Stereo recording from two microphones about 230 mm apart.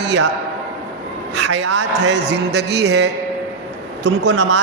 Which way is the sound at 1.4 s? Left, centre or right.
Right.